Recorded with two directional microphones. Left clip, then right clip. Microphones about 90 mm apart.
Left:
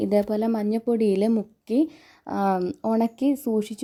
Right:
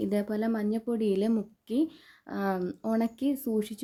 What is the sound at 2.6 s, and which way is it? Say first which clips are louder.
Speech: left 6 dB; 50° left (ahead or behind).